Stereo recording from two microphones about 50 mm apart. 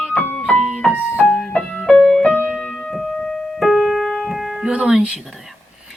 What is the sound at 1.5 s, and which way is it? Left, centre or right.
Music, centre.